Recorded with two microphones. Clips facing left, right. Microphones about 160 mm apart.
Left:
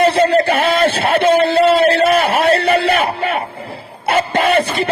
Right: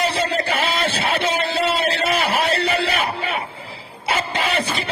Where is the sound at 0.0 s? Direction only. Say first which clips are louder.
Left 10 dB; 55° left (ahead or behind).